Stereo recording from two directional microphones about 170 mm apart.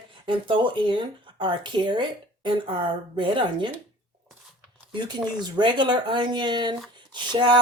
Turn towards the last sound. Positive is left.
turn(degrees=-25)  # may be behind; listen again after turning